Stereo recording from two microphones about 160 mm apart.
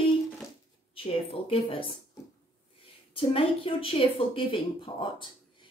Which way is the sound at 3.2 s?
35° left (ahead or behind).